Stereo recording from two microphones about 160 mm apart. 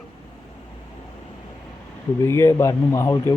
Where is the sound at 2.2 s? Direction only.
15° left (ahead or behind).